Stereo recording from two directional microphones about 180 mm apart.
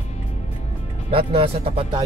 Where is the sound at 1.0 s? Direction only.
30° right (ahead or behind).